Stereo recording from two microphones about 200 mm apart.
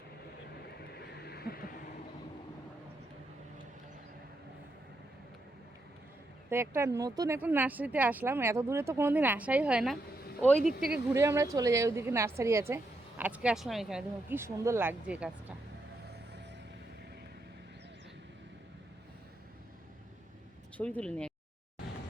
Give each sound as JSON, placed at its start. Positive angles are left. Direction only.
{"t": 0.8, "sound": "vehicle", "side_deg": 55}
{"t": 6.5, "sound": "a woman's voice", "side_deg": -10}
{"t": 11.1, "sound": "a woman's voice", "side_deg": -15}
{"t": 20.7, "sound": "speech", "side_deg": 5}